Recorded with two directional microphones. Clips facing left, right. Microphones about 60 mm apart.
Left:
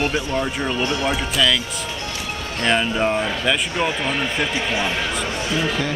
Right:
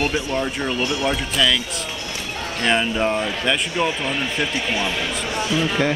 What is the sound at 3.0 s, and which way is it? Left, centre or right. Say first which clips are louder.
Speech: left 1 dB; centre.